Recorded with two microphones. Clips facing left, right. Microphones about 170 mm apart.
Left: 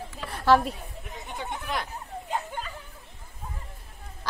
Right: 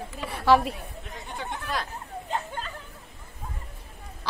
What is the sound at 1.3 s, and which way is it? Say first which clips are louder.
Chatter: even; 15° left (ahead or behind).